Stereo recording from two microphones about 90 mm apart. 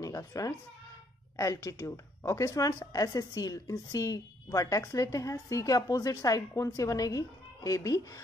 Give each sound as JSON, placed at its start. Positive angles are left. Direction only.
{"t": 0.0, "sound": "speech", "side_deg": 40}